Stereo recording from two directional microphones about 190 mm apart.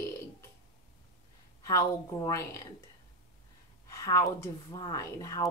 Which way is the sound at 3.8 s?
15° left (ahead or behind).